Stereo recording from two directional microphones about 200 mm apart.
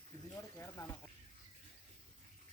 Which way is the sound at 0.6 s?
15° left (ahead or behind).